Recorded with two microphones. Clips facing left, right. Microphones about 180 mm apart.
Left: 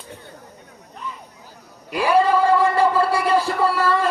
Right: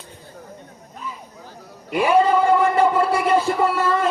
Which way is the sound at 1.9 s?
20° right (ahead or behind).